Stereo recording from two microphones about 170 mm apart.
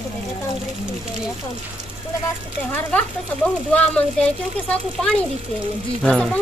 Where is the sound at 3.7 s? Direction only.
10° left (ahead or behind).